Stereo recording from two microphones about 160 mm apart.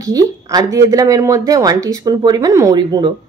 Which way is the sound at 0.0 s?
20° right (ahead or behind).